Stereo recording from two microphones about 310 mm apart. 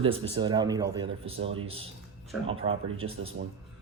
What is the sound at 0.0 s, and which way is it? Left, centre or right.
Speech, centre.